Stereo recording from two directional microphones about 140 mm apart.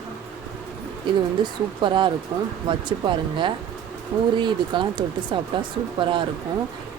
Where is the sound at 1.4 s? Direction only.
35° right (ahead or behind).